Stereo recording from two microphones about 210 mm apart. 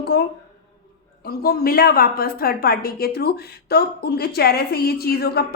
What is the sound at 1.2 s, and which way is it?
A woman's voice, 45° left (ahead or behind).